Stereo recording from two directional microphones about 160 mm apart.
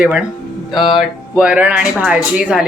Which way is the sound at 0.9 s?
10° right (ahead or behind).